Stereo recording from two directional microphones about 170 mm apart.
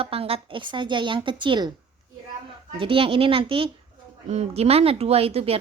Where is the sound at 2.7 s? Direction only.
30° right (ahead or behind).